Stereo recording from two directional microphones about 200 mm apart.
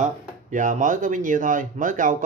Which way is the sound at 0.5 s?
40° right (ahead or behind).